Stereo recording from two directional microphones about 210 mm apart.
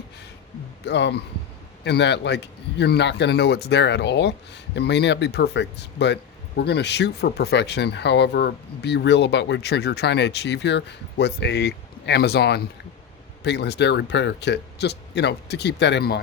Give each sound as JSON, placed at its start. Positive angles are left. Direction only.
{"t": 0.9, "sound": "a man's voice", "side_deg": 55}